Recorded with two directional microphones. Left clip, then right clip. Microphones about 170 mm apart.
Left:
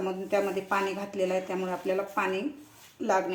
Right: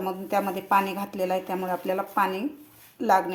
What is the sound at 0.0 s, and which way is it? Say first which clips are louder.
Speech: right 2 dB; 55° right (ahead or behind).